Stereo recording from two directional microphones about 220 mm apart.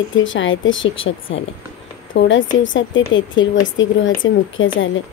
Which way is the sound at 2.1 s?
55° left (ahead or behind).